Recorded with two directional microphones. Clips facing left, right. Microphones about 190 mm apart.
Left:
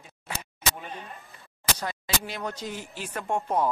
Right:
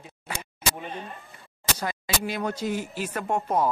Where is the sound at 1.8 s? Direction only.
10° right (ahead or behind).